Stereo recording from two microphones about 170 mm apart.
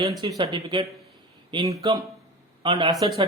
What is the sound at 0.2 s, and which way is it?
Speech, 25° right (ahead or behind).